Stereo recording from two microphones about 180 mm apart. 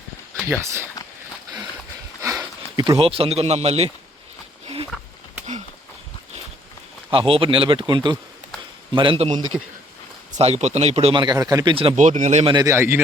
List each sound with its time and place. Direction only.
0.4 s a man's voice: 15° right (ahead or behind)
2.2 s speech: 20° right (ahead or behind); by 3.9 s 35° right (ahead or behind)
4.6 s horse: 30° right (ahead or behind)
7.1 s speech: 30° right (ahead or behind)
12.5 s a man's voice: 15° right (ahead or behind)